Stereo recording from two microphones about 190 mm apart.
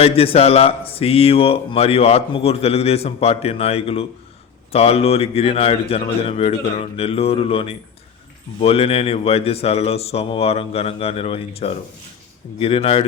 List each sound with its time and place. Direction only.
0.0 s a man's voice: 30° left (ahead or behind)